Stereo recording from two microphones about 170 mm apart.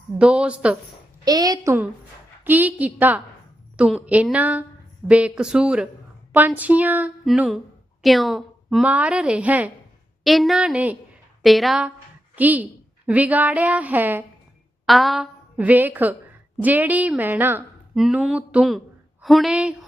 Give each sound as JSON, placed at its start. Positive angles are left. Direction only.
{"t": 0.2, "sound": "speech", "side_deg": -5}
{"t": 1.2, "sound": "a woman's voice", "side_deg": -20}
{"t": 14.8, "sound": "a woman's voice", "side_deg": 0}